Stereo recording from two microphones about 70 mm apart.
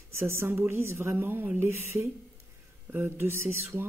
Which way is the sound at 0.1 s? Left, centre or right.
Right.